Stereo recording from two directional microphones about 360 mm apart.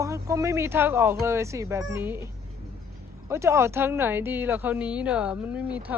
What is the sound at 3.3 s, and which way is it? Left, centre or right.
A woman's voice, centre.